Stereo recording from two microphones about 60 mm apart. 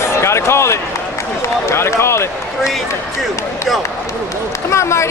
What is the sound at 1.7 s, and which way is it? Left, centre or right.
Run, left.